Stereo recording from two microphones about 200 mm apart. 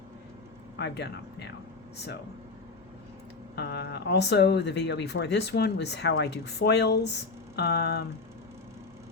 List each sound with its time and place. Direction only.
0.8 s speech: 60° left (ahead or behind)
3.5 s speech: 55° left (ahead or behind)